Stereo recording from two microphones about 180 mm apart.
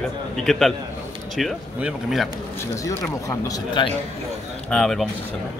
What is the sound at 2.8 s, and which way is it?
Speech, 15° left (ahead or behind).